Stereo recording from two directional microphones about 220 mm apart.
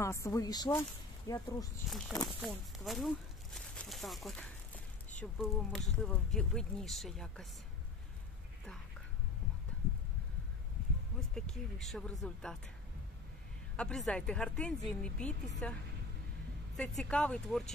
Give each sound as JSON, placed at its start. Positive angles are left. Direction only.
{"t": 0.0, "sound": "speech", "side_deg": 15}
{"t": 1.9, "sound": "speech", "side_deg": 0}
{"t": 11.1, "sound": "speech", "side_deg": 0}
{"t": 13.7, "sound": "speech", "side_deg": 5}
{"t": 16.7, "sound": "speech", "side_deg": 5}